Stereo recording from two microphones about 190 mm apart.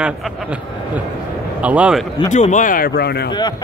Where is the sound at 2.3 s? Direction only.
40° left (ahead or behind); by 3.2 s 60° left (ahead or behind).